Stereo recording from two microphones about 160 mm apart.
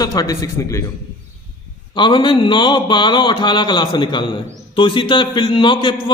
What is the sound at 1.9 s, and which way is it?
Speech, 30° left (ahead or behind).